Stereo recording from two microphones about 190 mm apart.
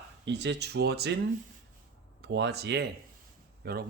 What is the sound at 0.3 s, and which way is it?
Speech, 65° right (ahead or behind).